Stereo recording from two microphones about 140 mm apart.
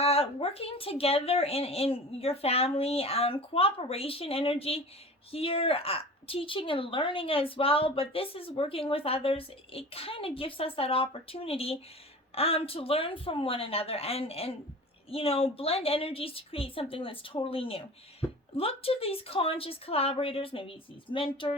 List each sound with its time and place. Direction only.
0.0 s a woman's voice: 45° left (ahead or behind)